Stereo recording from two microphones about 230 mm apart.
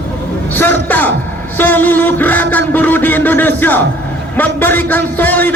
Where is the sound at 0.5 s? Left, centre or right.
Centre.